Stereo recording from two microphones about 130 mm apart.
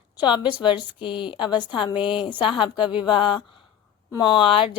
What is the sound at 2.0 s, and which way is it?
Speech, 5° right (ahead or behind).